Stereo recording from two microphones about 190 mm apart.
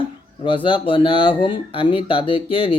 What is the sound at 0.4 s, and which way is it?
Speech, 25° left (ahead or behind).